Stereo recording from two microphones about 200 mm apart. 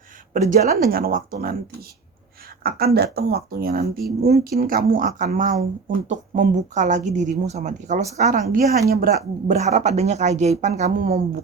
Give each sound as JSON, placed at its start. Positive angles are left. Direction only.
{"t": 0.5, "sound": "a woman's voice", "side_deg": -45}
{"t": 2.6, "sound": "a woman's voice", "side_deg": -50}